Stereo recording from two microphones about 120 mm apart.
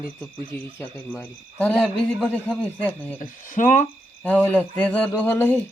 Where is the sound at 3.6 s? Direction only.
90° left.